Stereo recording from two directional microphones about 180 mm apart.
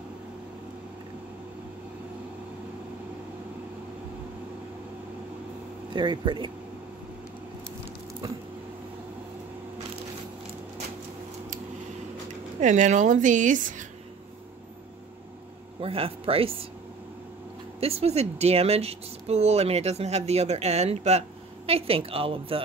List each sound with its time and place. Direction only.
5.9 s speech: 25° right (ahead or behind)
12.5 s a woman's voice: 45° right (ahead or behind)
15.8 s a woman's voice: 30° right (ahead or behind)
17.7 s a woman's voice: 35° right (ahead or behind)